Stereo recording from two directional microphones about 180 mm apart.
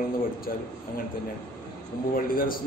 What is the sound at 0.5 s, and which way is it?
Speech, 50° left (ahead or behind).